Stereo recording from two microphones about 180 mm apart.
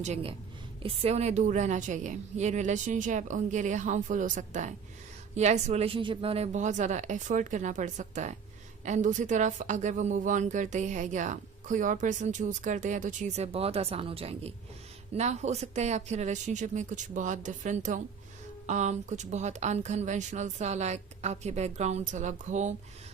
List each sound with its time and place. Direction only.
0.0 s a woman's voice: 35° right (ahead or behind)